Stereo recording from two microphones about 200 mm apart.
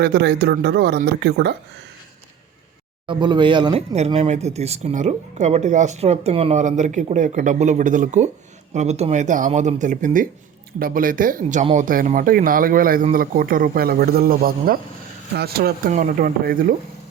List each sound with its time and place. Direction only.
0.0 s speech: 55° right (ahead or behind)
3.1 s speech: 20° right (ahead or behind); by 16.7 s 45° right (ahead or behind)